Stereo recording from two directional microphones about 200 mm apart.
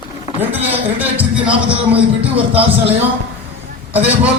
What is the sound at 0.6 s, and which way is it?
A man's voice, 10° right (ahead or behind).